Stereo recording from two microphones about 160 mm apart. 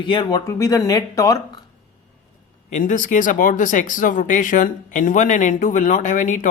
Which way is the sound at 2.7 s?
50° left (ahead or behind).